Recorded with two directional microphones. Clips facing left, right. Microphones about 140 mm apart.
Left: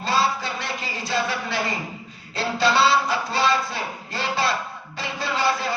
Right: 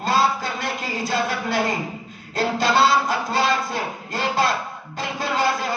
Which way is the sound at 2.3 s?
45° right (ahead or behind).